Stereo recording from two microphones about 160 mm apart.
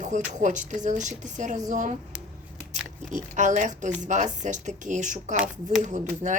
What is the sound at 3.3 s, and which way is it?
Speech, 50° right (ahead or behind).